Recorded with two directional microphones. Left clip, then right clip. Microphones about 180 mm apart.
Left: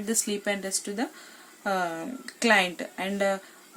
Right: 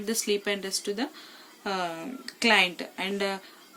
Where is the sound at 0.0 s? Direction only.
45° left (ahead or behind).